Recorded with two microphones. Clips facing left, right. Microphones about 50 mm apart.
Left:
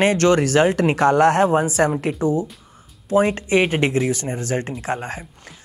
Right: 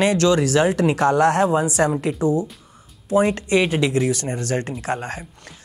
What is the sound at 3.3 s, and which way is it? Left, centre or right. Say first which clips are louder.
Speech: left 1 dB; left.